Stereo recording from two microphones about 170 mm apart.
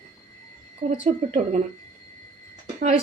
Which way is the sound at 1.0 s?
45° right (ahead or behind).